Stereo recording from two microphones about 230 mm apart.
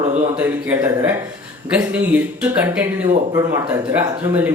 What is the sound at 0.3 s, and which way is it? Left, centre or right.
A man's voice, centre.